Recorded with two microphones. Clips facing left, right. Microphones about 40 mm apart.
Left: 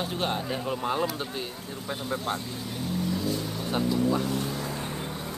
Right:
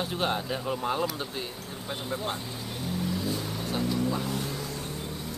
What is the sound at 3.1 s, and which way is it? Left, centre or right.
Vehicle, centre.